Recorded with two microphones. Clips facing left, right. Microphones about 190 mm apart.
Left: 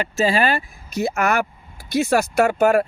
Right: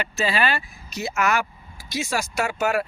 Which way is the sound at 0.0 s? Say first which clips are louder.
Left 5 dB; 45° left (ahead or behind).